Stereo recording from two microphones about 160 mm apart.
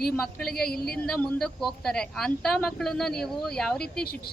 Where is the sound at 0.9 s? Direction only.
5° left (ahead or behind).